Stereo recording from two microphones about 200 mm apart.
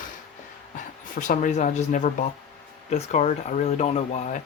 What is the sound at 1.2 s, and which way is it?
Speech, 40° left (ahead or behind).